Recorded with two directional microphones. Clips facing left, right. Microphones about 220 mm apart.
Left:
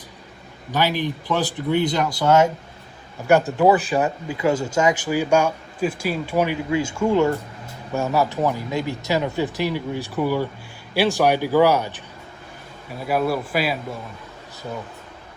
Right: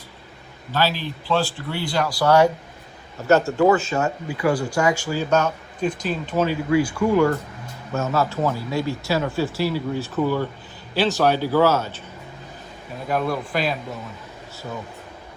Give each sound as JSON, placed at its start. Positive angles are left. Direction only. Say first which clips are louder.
{"t": 0.7, "sound": "speech", "louder": "left 2 dB", "side_deg": 15}
{"t": 13.1, "sound": "speech", "louder": "left 2 dB", "side_deg": 5}